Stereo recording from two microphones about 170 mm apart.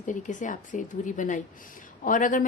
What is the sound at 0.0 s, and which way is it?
A woman's voice, 45° left (ahead or behind).